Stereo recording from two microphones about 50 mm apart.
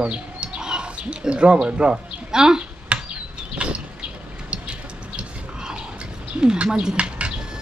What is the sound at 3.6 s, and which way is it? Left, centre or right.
Vehicle, right.